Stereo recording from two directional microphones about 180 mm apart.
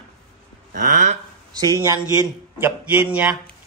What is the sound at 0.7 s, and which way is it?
Speech, 45° right (ahead or behind).